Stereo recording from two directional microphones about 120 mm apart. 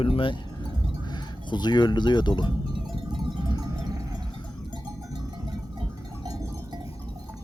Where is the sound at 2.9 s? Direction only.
40° right (ahead or behind).